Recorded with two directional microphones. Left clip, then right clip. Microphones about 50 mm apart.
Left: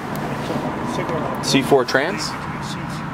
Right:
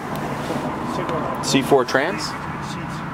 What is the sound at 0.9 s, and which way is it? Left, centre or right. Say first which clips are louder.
Speech: even; left.